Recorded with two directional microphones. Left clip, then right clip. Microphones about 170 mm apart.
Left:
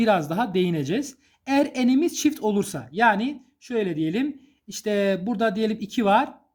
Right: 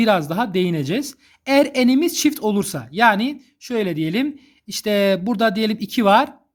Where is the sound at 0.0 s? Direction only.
25° right (ahead or behind).